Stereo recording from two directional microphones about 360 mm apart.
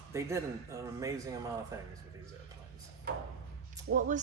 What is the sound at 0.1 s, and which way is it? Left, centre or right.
Speech, centre.